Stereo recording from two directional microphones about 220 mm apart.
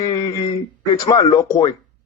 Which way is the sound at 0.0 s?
15° left (ahead or behind).